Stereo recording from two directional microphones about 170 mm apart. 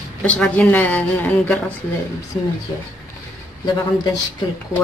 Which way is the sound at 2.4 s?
20° left (ahead or behind).